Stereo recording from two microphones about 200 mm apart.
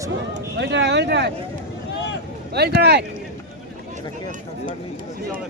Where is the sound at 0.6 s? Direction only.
60° right (ahead or behind).